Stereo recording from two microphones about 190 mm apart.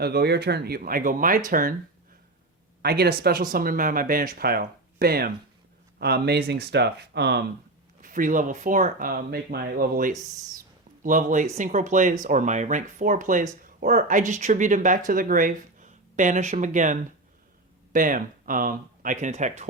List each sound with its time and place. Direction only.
0.0 s speech: 60° right (ahead or behind)
2.8 s speech: 55° right (ahead or behind)
8.0 s speech: 45° right (ahead or behind)